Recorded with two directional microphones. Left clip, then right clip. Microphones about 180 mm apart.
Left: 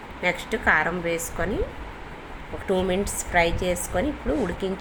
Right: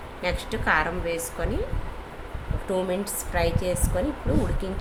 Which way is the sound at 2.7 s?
10° left (ahead or behind).